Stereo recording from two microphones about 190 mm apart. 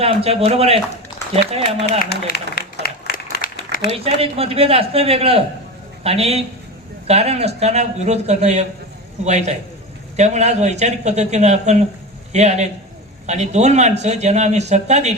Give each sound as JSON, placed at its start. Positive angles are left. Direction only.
{"t": 0.0, "sound": "a man's voice", "side_deg": -30}
{"t": 2.0, "sound": "applause", "side_deg": 50}
{"t": 3.3, "sound": "a sound", "side_deg": 55}
{"t": 3.8, "sound": "a man's voice", "side_deg": -30}